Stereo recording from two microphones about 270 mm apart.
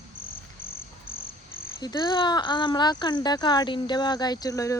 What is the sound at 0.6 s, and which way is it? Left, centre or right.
Cricket, left.